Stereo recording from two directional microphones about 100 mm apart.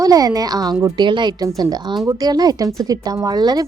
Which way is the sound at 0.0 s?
40° right (ahead or behind).